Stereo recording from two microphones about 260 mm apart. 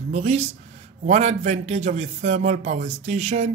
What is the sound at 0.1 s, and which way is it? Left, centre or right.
A man's voice, right.